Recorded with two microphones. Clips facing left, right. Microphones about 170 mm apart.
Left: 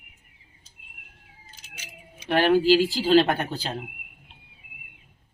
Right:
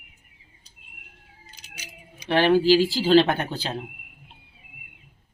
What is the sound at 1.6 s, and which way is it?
Keys jangling, centre (ahead or behind).